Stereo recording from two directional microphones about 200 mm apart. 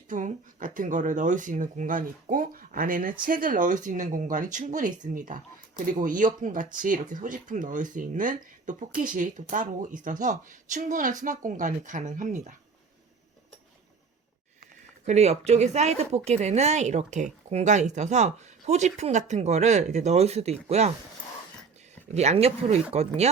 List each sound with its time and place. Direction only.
0.1 s speech: 40° right (ahead or behind)
15.0 s speech: 35° right (ahead or behind)
22.1 s speech: 35° right (ahead or behind)